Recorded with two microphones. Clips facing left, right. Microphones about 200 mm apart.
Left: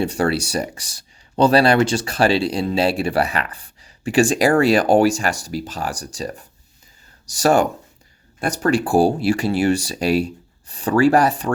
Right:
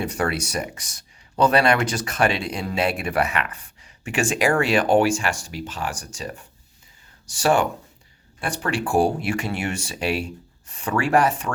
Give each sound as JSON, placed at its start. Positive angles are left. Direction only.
{"t": 0.0, "sound": "speech", "side_deg": 30}